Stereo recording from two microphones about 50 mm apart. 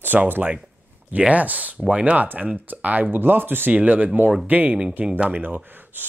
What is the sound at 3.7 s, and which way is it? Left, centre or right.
Speech, right.